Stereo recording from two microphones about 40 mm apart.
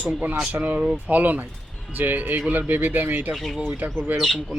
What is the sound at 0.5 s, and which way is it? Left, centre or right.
Speech, right.